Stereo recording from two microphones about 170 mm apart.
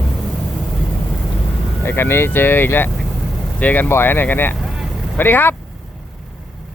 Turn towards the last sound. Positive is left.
turn(degrees=10)  # may be behind; listen again after turning